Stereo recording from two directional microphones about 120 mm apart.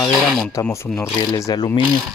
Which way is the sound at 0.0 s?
Centre (ahead or behind).